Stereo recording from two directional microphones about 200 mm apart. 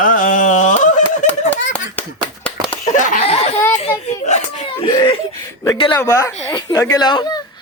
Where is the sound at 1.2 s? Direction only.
40° left (ahead or behind).